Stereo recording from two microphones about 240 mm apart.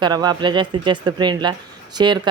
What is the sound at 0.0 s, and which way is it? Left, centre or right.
Speech, centre.